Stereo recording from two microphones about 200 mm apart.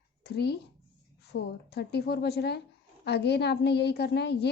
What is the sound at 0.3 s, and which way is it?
A woman's voice, 55° left (ahead or behind).